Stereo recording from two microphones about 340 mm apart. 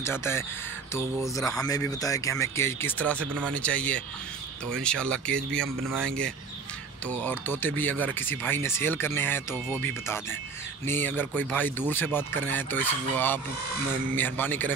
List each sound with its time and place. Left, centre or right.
0.0 s speech: centre